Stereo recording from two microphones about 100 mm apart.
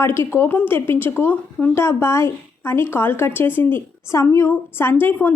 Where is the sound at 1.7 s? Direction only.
25° left (ahead or behind).